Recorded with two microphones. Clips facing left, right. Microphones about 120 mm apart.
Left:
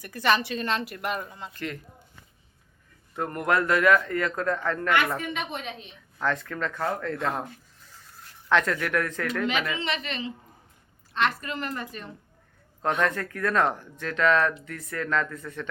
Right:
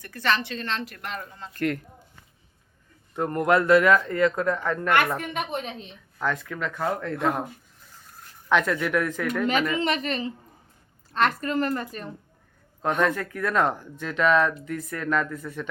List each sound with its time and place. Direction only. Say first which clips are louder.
0.0 s a woman's voice: left 2 dB; 15° left (ahead or behind)
1.5 s speech: right 9 dB; 55° right (ahead or behind)
3.2 s a man's voice: right 4 dB; 25° right (ahead or behind)
5.1 s a woman's voice: right 2 dB; 50° right (ahead or behind)
6.1 s speech: even; 10° right (ahead or behind)
8.4 s speech: right 1 dB; 15° right (ahead or behind)
9.7 s a woman's voice: right 5 dB; 45° right (ahead or behind)
13.0 s speech: right 2 dB; 10° right (ahead or behind)